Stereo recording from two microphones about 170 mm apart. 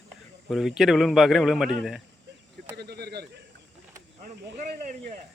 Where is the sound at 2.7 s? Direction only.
75° right (ahead or behind).